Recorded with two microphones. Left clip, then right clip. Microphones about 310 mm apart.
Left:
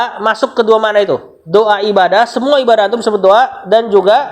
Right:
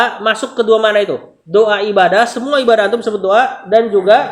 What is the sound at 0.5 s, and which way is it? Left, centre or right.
Speech, centre.